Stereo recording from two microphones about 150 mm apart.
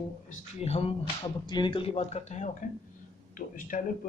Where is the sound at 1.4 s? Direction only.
30° left (ahead or behind); by 2.5 s 50° left (ahead or behind).